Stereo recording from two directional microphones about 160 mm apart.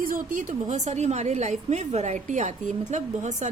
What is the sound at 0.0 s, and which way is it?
A woman's voice, 60° right (ahead or behind).